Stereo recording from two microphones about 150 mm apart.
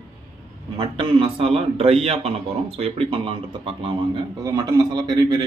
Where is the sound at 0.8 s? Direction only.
35° right (ahead or behind).